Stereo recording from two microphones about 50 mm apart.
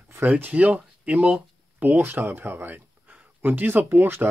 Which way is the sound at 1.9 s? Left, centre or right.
Right.